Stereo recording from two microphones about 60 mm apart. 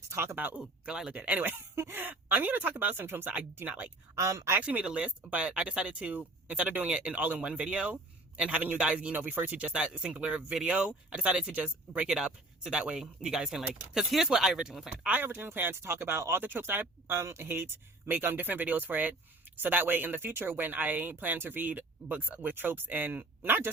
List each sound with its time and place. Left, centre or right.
0.1 s speech: right
0.3 s speech: right
0.9 s speech: centre
1.1 s speech: right
1.5 s speech: right
4.2 s speech: right
4.9 s speech: centre
15.2 s speech: right
17.5 s speech: right